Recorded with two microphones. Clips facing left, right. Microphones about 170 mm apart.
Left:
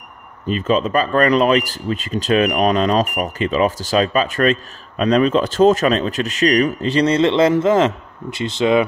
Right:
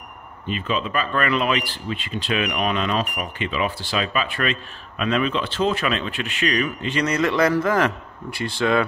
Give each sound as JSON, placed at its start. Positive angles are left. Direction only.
{"t": 0.5, "sound": "speech", "side_deg": 40}